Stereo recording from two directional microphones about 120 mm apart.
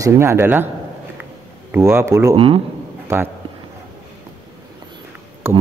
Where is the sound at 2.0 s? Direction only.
25° right (ahead or behind).